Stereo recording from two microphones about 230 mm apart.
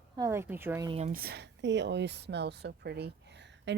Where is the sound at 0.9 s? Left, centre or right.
Right.